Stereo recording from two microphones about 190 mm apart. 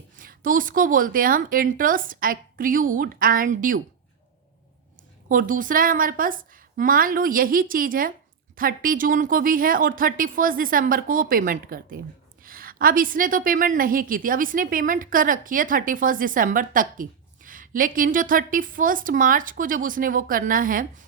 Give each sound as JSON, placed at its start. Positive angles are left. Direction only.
{"t": 0.2, "sound": "a woman's voice", "side_deg": -45}
{"t": 5.3, "sound": "a woman's voice", "side_deg": -45}